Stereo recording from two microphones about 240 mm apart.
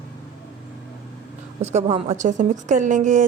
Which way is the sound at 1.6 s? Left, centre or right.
Right.